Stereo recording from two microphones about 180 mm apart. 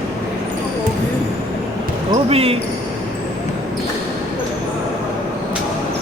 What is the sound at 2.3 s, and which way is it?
Speech, 35° right (ahead or behind).